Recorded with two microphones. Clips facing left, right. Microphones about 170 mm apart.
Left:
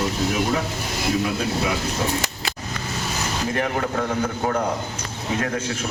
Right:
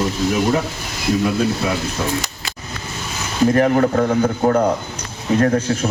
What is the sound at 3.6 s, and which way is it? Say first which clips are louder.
A man's voice: right 8 dB; 45° right (ahead or behind).